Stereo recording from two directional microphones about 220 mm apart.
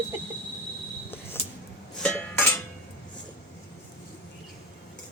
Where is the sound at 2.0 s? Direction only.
5° left (ahead or behind).